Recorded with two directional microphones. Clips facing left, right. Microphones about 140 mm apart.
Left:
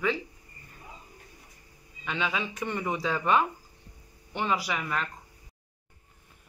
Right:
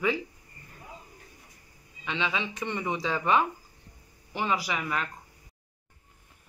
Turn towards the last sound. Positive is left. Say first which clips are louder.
# even
turn(degrees=-5)  # may be behind; listen again after turning